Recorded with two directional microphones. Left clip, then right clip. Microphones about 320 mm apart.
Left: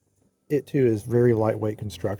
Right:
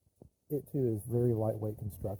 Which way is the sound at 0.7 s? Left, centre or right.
Left.